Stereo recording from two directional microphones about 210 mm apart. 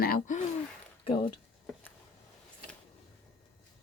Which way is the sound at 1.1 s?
25° left (ahead or behind).